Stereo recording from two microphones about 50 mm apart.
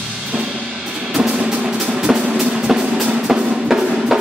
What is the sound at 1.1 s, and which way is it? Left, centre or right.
Music, centre.